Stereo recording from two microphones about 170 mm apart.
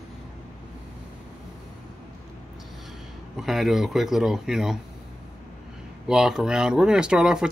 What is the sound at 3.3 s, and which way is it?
Speech, centre (ahead or behind).